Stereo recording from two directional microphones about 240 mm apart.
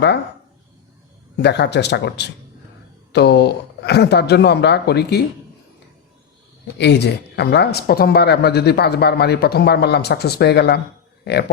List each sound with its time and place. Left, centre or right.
1.4 s speech: left
6.7 s speech: left